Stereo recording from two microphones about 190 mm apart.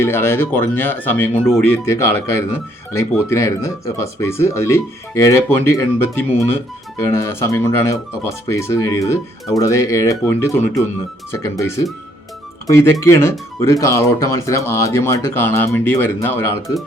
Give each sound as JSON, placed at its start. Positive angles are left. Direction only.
{"t": 0.0, "sound": "speech", "side_deg": 10}